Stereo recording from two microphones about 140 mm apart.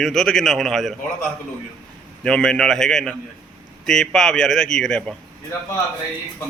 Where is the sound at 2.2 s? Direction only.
5° left (ahead or behind).